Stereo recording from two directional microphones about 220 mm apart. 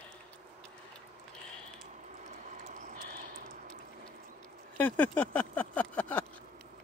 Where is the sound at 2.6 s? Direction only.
35° right (ahead or behind).